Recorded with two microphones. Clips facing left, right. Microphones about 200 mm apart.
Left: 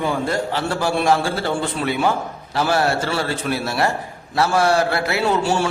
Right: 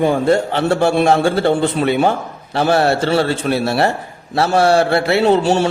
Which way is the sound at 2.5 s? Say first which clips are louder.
Right 5 dB; 25° right (ahead or behind).